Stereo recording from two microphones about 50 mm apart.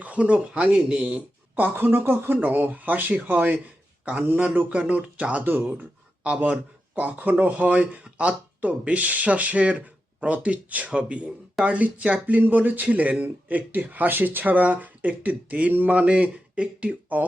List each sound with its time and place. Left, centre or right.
0.0 s speech: right
1.7 s speech: right
5.4 s speech: right
6.2 s speech: right